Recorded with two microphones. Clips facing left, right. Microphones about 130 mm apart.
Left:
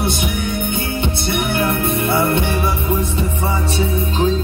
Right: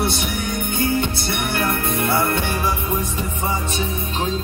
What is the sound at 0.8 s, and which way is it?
Music, 20° left (ahead or behind).